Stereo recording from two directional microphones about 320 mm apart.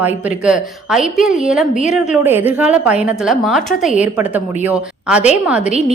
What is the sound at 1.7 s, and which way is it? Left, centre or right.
Speech, left.